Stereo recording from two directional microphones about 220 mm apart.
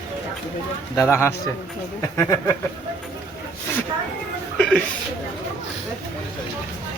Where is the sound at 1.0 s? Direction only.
10° left (ahead or behind).